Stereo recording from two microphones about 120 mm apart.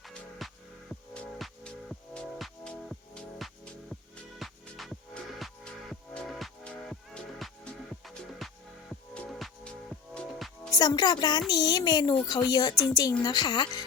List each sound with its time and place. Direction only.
0.0 s music: centre (ahead or behind)
10.2 s music: centre (ahead or behind)
10.8 s speech: 30° left (ahead or behind)